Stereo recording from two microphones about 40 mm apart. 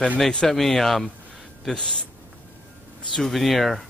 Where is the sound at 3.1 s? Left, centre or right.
Centre.